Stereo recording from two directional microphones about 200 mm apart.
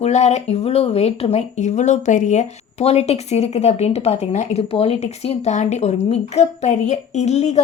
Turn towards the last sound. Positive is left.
turn(degrees=35)  # may be behind; listen again after turning